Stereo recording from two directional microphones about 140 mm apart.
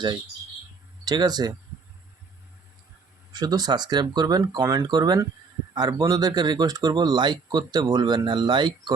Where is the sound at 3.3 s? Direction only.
30° right (ahead or behind).